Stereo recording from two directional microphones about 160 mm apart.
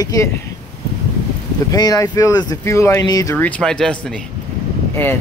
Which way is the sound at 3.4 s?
5° left (ahead or behind).